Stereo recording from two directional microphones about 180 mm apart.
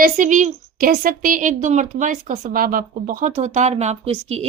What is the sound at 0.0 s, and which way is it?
A woman's voice, 45° right (ahead or behind).